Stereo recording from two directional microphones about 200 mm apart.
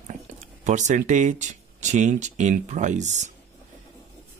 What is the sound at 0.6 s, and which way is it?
Speech, 35° right (ahead or behind).